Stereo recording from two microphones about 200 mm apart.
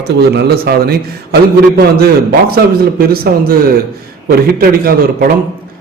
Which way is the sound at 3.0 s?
50° right (ahead or behind).